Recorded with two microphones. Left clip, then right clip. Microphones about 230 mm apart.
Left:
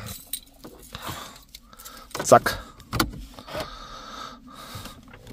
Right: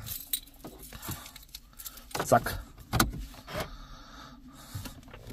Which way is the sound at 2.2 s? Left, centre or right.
Left.